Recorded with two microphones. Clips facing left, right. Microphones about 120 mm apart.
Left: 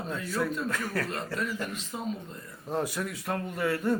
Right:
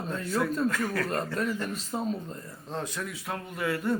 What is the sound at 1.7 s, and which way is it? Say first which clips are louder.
Speech: right 3 dB; 40° right (ahead or behind).